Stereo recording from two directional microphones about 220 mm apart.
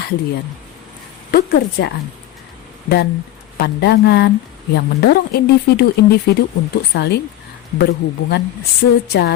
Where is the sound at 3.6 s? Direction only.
50° left (ahead or behind).